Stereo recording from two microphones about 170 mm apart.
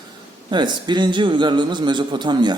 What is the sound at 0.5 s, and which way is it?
A man's voice, 25° right (ahead or behind).